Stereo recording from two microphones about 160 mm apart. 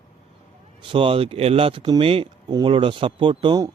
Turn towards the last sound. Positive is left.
turn(degrees=-25)  # may be behind; listen again after turning